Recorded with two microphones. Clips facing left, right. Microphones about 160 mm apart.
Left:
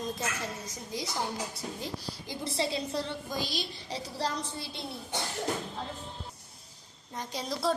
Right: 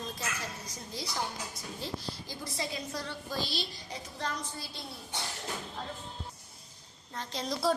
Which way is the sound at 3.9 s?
35° left (ahead or behind).